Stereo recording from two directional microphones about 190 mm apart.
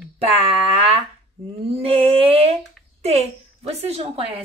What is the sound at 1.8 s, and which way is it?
Speech, 30° right (ahead or behind).